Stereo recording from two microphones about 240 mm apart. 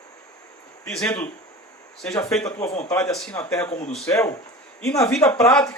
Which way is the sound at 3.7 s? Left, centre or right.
Left.